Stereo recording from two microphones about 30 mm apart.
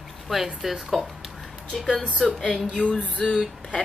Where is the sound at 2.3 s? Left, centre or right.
Centre.